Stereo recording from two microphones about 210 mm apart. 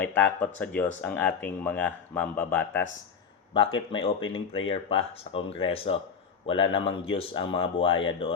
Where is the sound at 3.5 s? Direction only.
25° left (ahead or behind).